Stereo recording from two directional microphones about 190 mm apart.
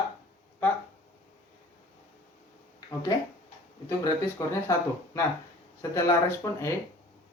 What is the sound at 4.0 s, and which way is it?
A man's voice, 15° left (ahead or behind).